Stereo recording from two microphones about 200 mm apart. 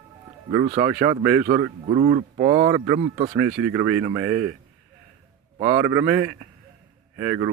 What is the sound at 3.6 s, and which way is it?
Speech, 10° right (ahead or behind).